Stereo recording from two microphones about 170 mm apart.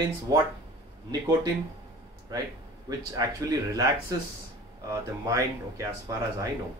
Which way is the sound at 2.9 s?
20° right (ahead or behind).